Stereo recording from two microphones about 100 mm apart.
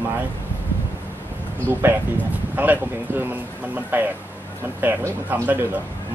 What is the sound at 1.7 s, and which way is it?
Speech, 20° right (ahead or behind).